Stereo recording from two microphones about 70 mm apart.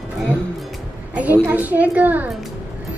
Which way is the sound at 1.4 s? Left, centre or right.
Right.